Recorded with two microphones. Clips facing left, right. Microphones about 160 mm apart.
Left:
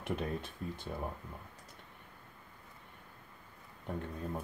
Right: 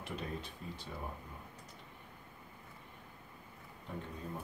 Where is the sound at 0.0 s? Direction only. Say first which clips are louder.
Left 5 dB; 50° left (ahead or behind).